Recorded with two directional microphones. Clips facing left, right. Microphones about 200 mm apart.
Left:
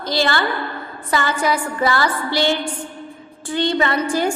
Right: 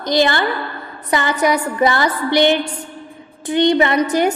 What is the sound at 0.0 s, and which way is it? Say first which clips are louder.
A woman's voice: right 4 dB; 20° right (ahead or behind).